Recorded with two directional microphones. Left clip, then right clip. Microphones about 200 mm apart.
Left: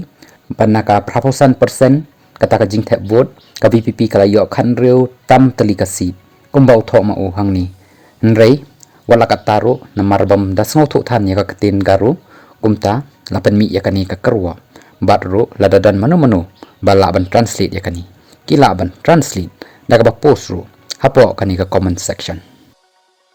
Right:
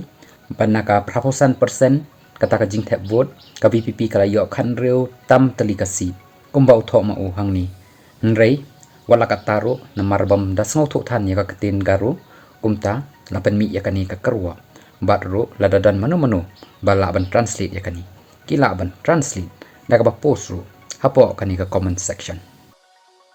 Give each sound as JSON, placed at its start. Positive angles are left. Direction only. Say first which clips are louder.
{"t": 0.2, "sound": "speech", "louder": "left 6 dB", "side_deg": 40}